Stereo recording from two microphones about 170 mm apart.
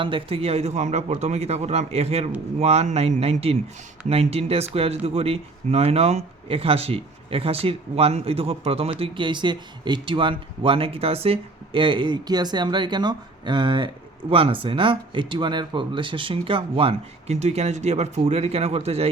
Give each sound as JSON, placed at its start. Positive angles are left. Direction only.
{"t": 0.0, "sound": "speech", "side_deg": -30}